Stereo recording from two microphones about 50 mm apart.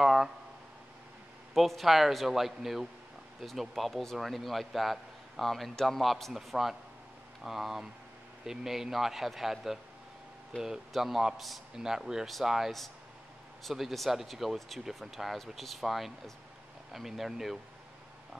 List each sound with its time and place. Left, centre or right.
0.0 s a sound: centre
1.5 s a man's voice: centre
6.3 s a man's voice: centre
10.5 s speech: left
10.9 s a man's voice: centre